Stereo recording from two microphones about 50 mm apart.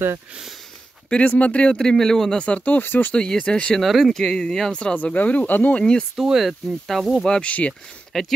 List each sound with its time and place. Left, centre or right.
1.1 s speech: left
1.8 s speech: centre
2.4 s speech: left
2.8 s speech: left
3.2 s speech: centre
3.8 s speech: centre
4.1 s speech: centre
4.9 s speech: left
5.8 s speech: left
6.1 s speech: centre
7.2 s speech: centre
8.1 s speech: centre